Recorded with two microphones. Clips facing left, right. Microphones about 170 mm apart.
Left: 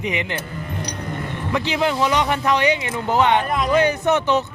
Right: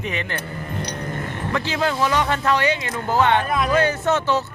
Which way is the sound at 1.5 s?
15° left (ahead or behind).